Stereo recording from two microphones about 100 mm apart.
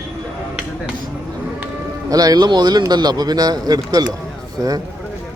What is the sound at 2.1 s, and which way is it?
Speech, 40° right (ahead or behind).